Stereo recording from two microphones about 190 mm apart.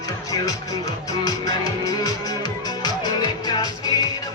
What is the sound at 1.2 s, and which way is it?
Music, 20° left (ahead or behind).